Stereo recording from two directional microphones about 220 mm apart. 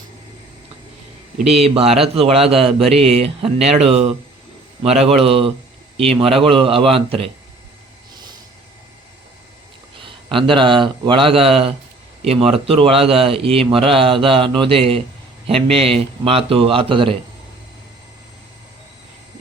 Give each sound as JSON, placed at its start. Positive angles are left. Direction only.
{"t": 1.6, "sound": "a man's voice", "side_deg": -25}
{"t": 10.2, "sound": "a man's voice", "side_deg": -25}